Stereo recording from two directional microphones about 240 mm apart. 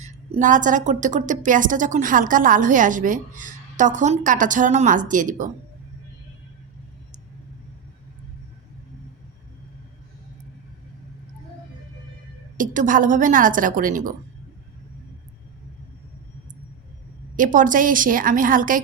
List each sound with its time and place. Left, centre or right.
0.0 s a woman's voice: right
12.5 s a woman's voice: right
17.3 s a woman's voice: right